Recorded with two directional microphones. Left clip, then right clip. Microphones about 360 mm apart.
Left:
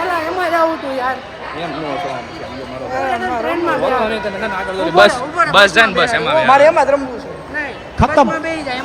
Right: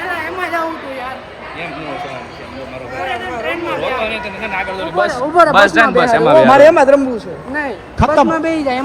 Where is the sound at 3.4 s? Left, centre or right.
Left.